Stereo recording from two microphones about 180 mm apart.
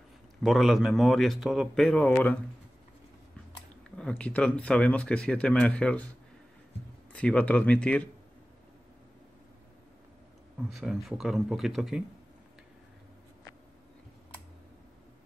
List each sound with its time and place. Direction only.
0.4 s speech: centre (ahead or behind)
3.9 s speech: 5° left (ahead or behind)
7.1 s speech: 5° left (ahead or behind)
10.7 s speech: centre (ahead or behind)